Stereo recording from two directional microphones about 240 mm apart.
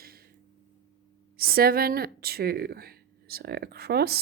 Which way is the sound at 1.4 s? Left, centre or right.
Right.